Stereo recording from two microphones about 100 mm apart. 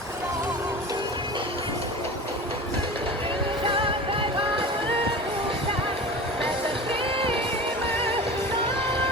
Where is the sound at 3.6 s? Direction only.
60° right (ahead or behind).